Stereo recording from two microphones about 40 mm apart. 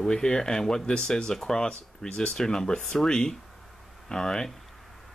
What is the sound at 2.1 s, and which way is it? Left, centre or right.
Speech, left.